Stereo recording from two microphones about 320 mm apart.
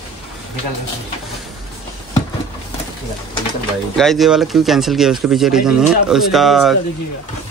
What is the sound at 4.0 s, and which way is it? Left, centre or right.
Speech, centre.